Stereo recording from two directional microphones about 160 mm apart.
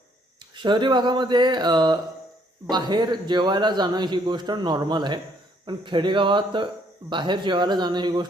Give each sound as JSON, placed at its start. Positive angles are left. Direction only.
{"t": 0.5, "sound": "speech", "side_deg": -30}